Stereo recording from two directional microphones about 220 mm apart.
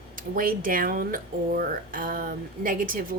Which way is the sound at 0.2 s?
40° right (ahead or behind).